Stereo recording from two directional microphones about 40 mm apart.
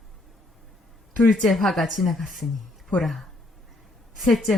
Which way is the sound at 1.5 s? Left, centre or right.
Centre.